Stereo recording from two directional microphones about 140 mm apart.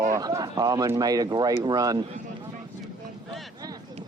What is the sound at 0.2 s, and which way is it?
Speech, 25° right (ahead or behind).